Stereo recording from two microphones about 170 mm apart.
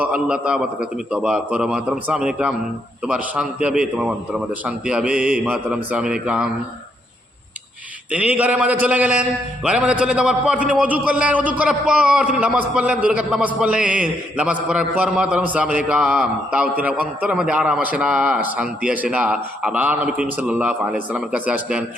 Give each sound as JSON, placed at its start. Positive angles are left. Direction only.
{"t": 0.0, "sound": "a man's voice", "side_deg": -5}
{"t": 8.1, "sound": "a man's voice", "side_deg": -10}